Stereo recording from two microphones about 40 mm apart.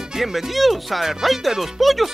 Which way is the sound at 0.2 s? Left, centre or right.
Centre.